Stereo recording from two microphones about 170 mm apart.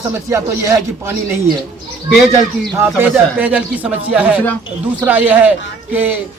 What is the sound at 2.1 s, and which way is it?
A man's voice, centre (ahead or behind).